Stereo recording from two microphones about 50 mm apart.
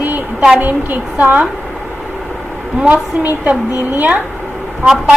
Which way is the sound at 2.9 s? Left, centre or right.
Right.